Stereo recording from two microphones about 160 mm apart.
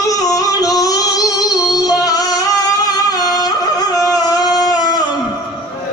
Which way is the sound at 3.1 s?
25° left (ahead or behind).